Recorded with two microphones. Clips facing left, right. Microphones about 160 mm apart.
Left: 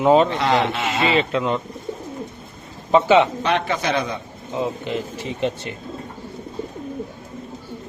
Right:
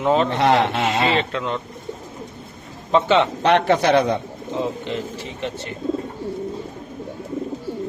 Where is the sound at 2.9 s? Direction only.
10° left (ahead or behind).